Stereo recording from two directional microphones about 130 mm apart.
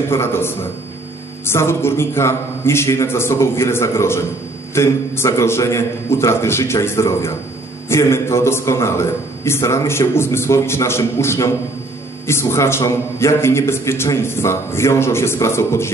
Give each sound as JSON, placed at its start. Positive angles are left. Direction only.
{"t": 0.1, "sound": "a man's voice", "side_deg": 20}